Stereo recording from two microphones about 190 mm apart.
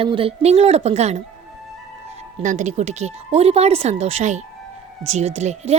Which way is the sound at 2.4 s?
40° right (ahead or behind).